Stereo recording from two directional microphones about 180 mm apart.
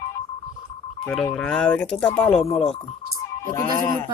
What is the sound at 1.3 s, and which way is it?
Speech, 5° left (ahead or behind).